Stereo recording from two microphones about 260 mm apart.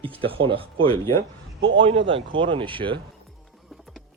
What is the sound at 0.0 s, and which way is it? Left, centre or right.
Speech, right.